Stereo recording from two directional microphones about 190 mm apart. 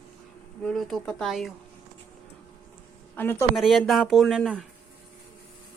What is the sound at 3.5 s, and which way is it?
Speech, centre (ahead or behind).